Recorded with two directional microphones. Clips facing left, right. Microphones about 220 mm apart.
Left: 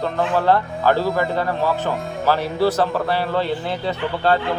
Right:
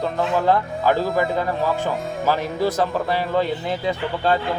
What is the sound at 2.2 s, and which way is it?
Speech, 15° right (ahead or behind).